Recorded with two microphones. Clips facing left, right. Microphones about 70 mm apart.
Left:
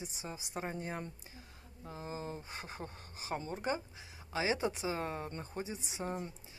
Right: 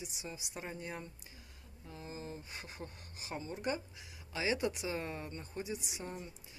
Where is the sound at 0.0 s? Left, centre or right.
Left.